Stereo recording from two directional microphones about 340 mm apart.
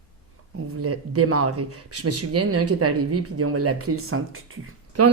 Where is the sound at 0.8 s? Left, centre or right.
Right.